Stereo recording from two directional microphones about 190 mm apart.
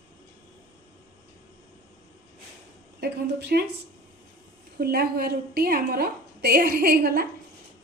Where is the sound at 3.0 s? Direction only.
60° right (ahead or behind).